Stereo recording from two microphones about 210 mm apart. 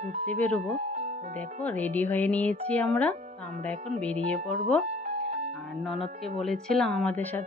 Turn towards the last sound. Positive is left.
turn(degrees=10)  # may be behind; listen again after turning